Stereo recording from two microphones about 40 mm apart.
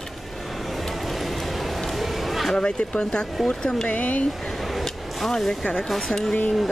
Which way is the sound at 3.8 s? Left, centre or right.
Left.